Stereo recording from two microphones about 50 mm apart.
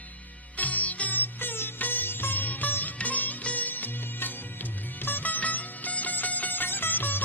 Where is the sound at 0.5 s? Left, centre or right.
Left.